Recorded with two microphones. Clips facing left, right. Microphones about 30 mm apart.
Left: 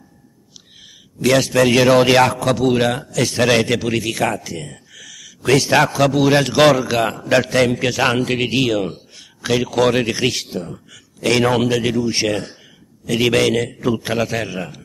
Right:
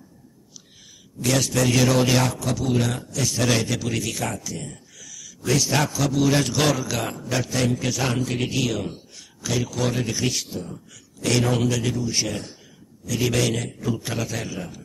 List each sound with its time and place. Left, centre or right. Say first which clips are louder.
1.2 s a man's voice: left 7 dB; left
7.2 s a man's voice: left 8 dB; left